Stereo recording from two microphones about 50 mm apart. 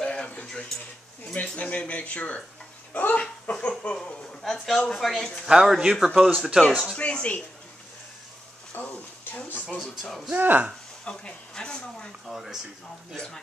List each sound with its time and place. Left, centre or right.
0.0 s a sound: centre
1.3 s speech: left
2.9 s a sound: left
3.5 s speech: left
3.9 s speech: centre
5.5 s speech: centre
6.1 s speech: centre
7.0 s speech: left
8.7 s a sound: left
10.3 s speech: right
11.1 s speech: centre
12.3 s speech: centre